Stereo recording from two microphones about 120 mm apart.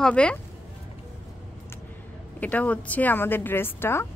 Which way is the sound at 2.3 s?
15° left (ahead or behind).